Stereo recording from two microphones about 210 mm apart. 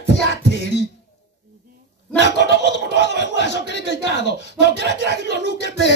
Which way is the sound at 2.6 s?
55° left (ahead or behind).